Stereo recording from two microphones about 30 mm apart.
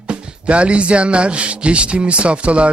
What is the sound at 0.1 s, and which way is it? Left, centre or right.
Speech, right.